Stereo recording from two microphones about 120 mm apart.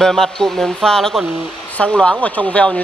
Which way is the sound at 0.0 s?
5° left (ahead or behind).